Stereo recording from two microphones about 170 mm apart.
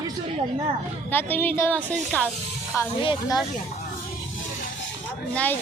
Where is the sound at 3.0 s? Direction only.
25° left (ahead or behind).